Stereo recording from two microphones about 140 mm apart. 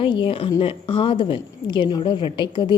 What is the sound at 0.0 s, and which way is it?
A woman's voice, 35° left (ahead or behind).